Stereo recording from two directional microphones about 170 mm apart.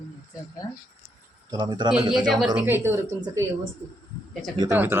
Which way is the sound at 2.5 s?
15° right (ahead or behind).